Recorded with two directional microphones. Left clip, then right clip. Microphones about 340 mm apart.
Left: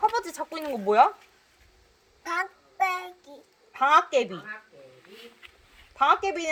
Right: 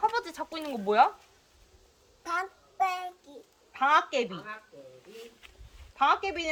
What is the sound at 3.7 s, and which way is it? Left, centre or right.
Speech, left.